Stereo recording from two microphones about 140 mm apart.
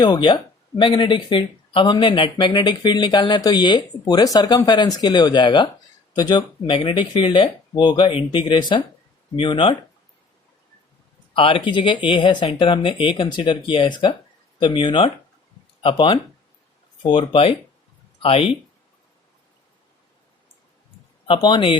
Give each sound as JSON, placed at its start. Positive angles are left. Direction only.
{"t": 0.0, "sound": "speech", "side_deg": 35}
{"t": 11.3, "sound": "speech", "side_deg": 40}
{"t": 21.2, "sound": "speech", "side_deg": 35}